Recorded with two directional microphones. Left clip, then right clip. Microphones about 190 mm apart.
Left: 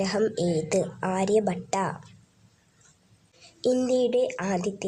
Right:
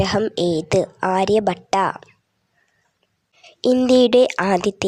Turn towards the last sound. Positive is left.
turn(degrees=-50)  # may be behind; listen again after turning